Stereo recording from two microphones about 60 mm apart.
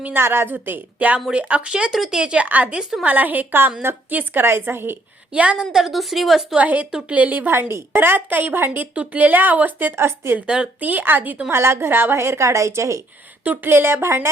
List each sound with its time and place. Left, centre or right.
0.0 s a woman's voice: right; by 2.5 s centre
2.5 s a woman's voice: right
4.4 s a woman's voice: right
5.3 s a woman's voice: right
5.7 s a woman's voice: centre
6.6 s a woman's voice: right
7.7 s a woman's voice: right
9.9 s a woman's voice: right
10.4 s a woman's voice: centre
10.8 s a woman's voice: right
11.5 s a woman's voice: right
13.4 s a woman's voice: right